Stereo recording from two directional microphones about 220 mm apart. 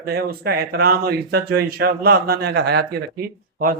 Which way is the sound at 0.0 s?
45° right (ahead or behind).